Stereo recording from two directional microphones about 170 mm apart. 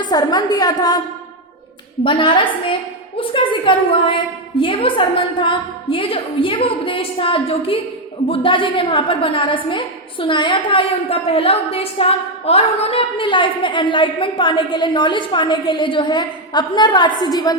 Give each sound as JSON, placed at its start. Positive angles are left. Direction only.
{"t": 0.1, "sound": "a woman's voice", "side_deg": 25}
{"t": 2.0, "sound": "a woman's voice", "side_deg": 30}